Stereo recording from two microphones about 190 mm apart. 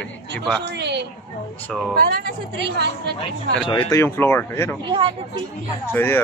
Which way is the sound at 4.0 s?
10° left (ahead or behind).